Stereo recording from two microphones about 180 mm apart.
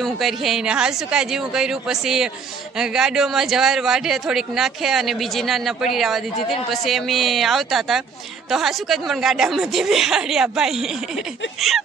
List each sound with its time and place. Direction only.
0.0 s a man's voice: centre (ahead or behind)